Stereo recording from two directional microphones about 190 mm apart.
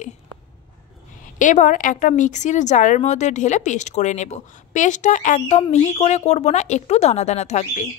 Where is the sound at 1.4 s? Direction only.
40° left (ahead or behind).